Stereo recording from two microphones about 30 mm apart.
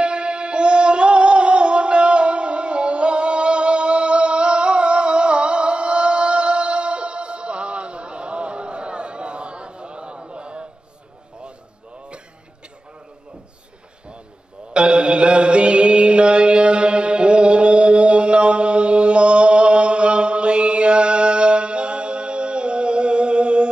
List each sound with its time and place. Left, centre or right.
0.0 s music: right
14.7 s mantra: right